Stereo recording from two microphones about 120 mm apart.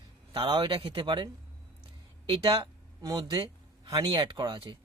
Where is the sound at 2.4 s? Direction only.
35° right (ahead or behind).